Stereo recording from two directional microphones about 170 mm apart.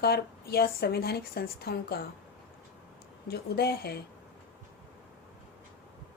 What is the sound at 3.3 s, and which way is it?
Speech, 65° left (ahead or behind).